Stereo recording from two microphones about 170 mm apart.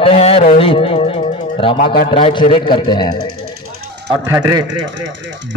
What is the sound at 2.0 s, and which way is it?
A man's voice, 30° left (ahead or behind).